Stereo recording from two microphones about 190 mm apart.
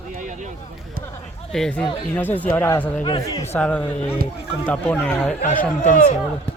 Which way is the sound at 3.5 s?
5° left (ahead or behind).